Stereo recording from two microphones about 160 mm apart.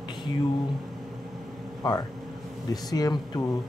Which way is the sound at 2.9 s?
25° left (ahead or behind).